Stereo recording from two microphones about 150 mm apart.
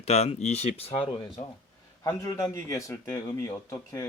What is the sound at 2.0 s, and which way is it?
A man's voice, 20° left (ahead or behind).